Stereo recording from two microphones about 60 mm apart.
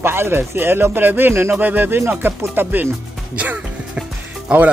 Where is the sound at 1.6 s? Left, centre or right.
Right.